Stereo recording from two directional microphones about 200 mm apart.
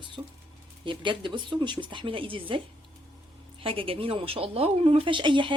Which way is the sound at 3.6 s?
25° right (ahead or behind).